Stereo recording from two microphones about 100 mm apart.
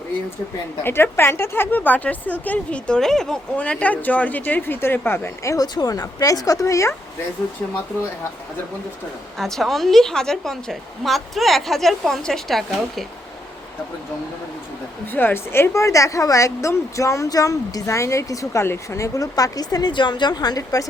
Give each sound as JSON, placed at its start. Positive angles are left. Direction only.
{"t": 0.8, "sound": "speech", "side_deg": 25}
{"t": 5.6, "sound": "a woman's voice", "side_deg": 40}
{"t": 9.4, "sound": "a woman's voice", "side_deg": 0}
{"t": 15.0, "sound": "a woman's voice", "side_deg": 20}